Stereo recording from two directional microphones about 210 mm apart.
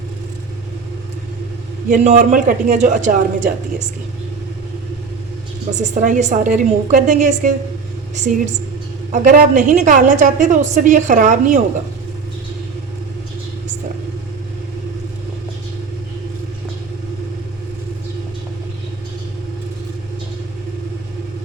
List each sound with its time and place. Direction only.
1.9 s a woman's voice: 35° right (ahead or behind)
5.7 s a woman's voice: 35° right (ahead or behind)